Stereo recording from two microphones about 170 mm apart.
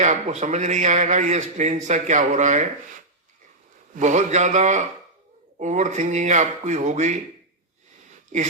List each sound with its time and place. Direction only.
0.0 s a man's voice: 45° right (ahead or behind)
3.9 s a man's voice: 45° right (ahead or behind)